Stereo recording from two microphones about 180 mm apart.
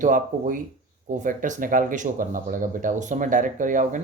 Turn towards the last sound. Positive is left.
turn(degrees=-45)  # may be behind; listen again after turning